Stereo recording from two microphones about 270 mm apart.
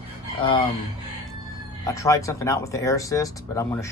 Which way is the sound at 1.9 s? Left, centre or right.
Centre.